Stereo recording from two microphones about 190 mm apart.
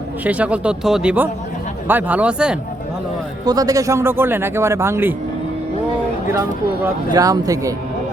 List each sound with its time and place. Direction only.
0.3 s speech: 5° right (ahead or behind)
3.4 s speech: 20° right (ahead or behind)
7.1 s speech: 20° right (ahead or behind)